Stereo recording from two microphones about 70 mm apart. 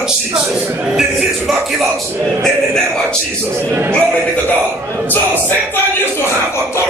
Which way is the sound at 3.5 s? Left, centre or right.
Right.